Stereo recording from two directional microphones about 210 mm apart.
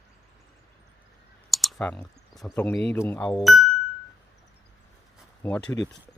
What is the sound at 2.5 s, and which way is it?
Speech, 10° left (ahead or behind).